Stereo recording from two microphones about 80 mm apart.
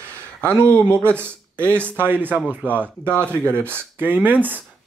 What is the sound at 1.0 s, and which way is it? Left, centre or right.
Speech, right.